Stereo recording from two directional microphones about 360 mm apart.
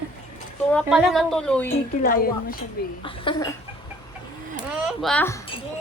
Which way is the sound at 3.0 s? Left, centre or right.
Centre.